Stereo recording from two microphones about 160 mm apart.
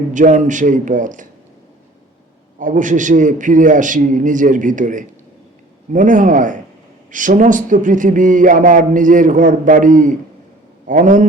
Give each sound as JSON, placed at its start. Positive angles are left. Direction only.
{"t": 0.1, "sound": "a man's voice", "side_deg": -50}
{"t": 2.6, "sound": "a man's voice", "side_deg": -55}
{"t": 7.1, "sound": "a sound", "side_deg": -55}
{"t": 10.8, "sound": "a man's voice", "side_deg": -55}